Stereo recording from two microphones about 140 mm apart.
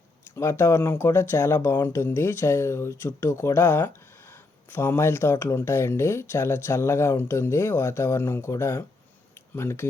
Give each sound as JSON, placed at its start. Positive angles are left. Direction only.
{"t": 0.3, "sound": "speech", "side_deg": 20}